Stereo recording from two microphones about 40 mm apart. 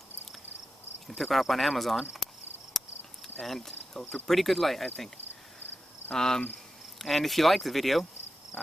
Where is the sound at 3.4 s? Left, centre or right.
Centre.